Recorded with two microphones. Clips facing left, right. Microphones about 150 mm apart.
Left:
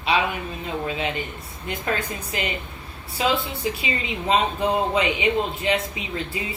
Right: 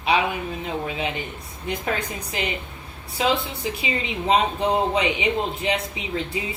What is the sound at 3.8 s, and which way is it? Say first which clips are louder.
Speech: right 1 dB; 20° right (ahead or behind).